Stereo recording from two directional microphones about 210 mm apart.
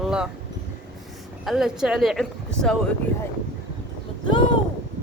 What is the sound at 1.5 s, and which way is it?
A woman's voice, centre (ahead or behind).